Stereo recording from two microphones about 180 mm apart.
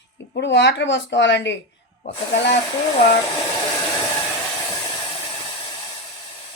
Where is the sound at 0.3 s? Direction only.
75° left (ahead or behind).